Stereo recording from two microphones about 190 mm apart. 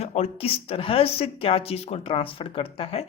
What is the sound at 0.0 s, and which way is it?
Speech, 35° left (ahead or behind).